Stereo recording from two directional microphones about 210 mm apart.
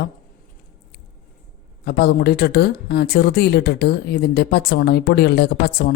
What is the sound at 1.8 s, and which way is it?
Speech, 50° left (ahead or behind).